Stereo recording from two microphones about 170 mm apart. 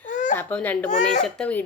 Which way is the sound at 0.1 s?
45° left (ahead or behind).